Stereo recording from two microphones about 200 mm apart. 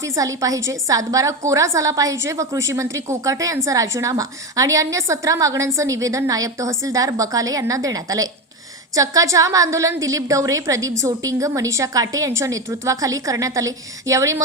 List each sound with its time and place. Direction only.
0.0 s a woman's voice: 15° right (ahead or behind)